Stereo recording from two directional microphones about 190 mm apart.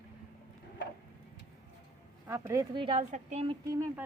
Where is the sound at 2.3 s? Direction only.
15° right (ahead or behind).